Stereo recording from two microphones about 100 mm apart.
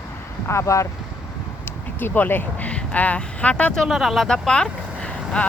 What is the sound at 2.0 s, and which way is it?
Speech, 20° left (ahead or behind).